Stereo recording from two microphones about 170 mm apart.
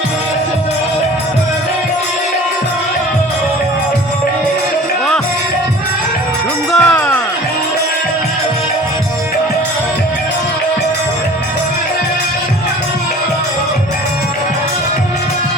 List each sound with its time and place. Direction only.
6.7 s music: 10° left (ahead or behind)